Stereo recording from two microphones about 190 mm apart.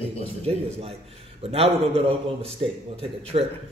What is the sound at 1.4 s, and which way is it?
A man's voice, 30° right (ahead or behind).